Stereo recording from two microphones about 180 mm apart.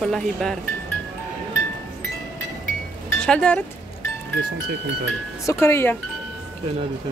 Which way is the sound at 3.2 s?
5° left (ahead or behind).